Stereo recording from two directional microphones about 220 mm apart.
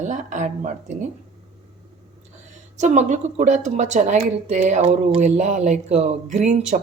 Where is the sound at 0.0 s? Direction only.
35° right (ahead or behind).